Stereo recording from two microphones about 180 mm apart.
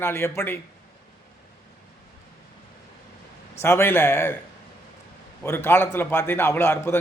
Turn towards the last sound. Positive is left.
turn(degrees=15)  # may be behind; listen again after turning